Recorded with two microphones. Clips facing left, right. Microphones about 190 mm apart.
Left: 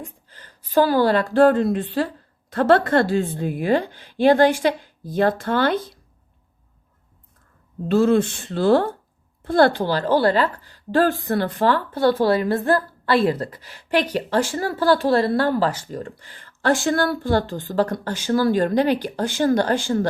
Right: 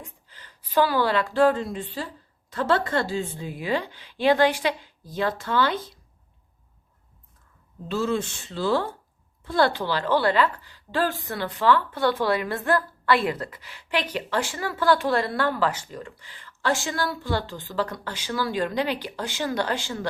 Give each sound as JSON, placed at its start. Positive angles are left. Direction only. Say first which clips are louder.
{"t": 0.0, "sound": "a woman's voice", "louder": "left 7 dB", "side_deg": 45}
{"t": 7.9, "sound": "a woman's voice", "louder": "left 9 dB", "side_deg": 55}